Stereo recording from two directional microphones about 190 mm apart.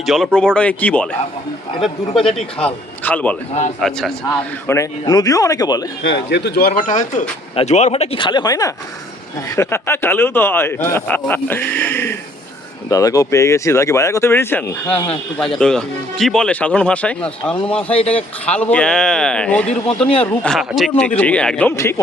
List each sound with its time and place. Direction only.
0.0 s speech: centre (ahead or behind)
4.6 s a man's voice: 15° left (ahead or behind)
6.0 s a man's voice: 70° left (ahead or behind); by 22.0 s 15° left (ahead or behind)